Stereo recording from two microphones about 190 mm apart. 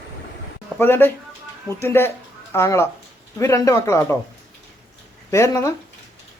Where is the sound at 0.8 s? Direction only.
10° left (ahead or behind).